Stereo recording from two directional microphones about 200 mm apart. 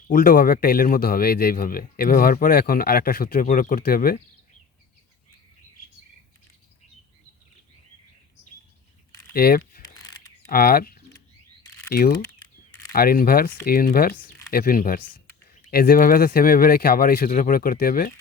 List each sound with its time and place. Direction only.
0.1 s speech: 45° left (ahead or behind)
9.3 s speech: 50° left (ahead or behind)